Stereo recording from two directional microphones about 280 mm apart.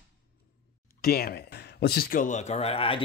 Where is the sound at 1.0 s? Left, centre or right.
Left.